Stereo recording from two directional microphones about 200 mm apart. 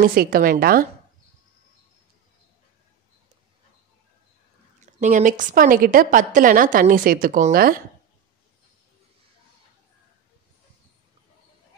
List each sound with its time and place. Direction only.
0.0 s a woman's voice: 50° right (ahead or behind)
4.7 s a sound: 35° right (ahead or behind)
5.4 s a woman's voice: 40° right (ahead or behind)